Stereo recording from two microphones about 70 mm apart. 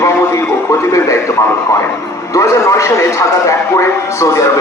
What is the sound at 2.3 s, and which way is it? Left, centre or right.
A man's voice, left.